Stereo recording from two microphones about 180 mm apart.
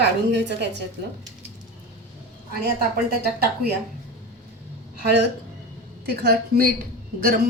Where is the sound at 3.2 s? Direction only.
65° right (ahead or behind).